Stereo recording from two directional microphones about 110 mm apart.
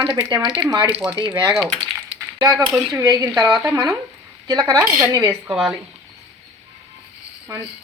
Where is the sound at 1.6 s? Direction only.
55° right (ahead or behind).